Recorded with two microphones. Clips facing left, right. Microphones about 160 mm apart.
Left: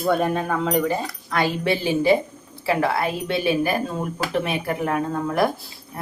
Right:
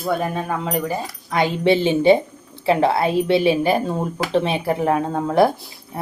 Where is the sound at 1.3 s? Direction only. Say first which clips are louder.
Right 5 dB; 20° right (ahead or behind).